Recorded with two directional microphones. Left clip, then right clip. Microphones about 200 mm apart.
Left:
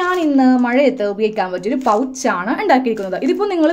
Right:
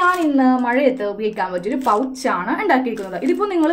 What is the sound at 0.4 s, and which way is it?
A woman's voice, 45° left (ahead or behind).